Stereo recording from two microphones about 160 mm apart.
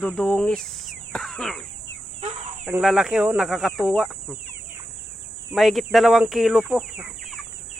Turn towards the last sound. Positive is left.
turn(degrees=-5)  # may be behind; listen again after turning